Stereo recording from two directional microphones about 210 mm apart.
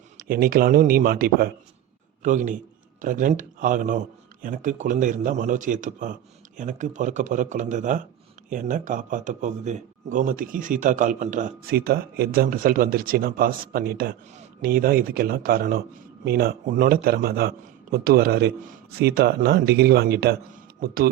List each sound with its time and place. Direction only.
0.2 s a man's voice: 45° right (ahead or behind)